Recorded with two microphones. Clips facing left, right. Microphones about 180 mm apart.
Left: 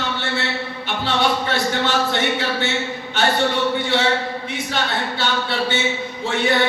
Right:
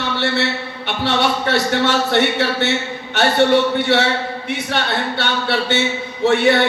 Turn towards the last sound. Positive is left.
turn(degrees=-65)  # may be behind; listen again after turning